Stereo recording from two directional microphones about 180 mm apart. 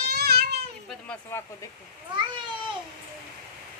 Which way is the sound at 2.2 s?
25° right (ahead or behind).